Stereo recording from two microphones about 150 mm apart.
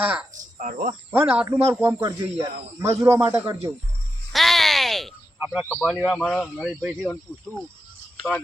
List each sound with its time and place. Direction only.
0.6 s speech: 60° right (ahead or behind)
1.1 s speech: 10° right (ahead or behind)
4.3 s a sound: centre (ahead or behind)
5.4 s speech: 10° right (ahead or behind)